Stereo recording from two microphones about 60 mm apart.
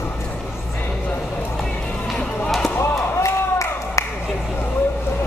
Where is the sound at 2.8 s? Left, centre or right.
Left.